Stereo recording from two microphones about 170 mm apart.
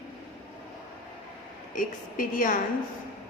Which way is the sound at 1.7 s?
55° left (ahead or behind).